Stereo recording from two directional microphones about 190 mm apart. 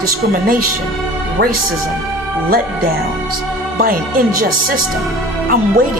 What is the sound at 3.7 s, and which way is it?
Speech, 50° right (ahead or behind).